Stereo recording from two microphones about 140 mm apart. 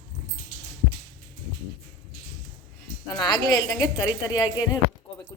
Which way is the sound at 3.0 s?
25° left (ahead or behind).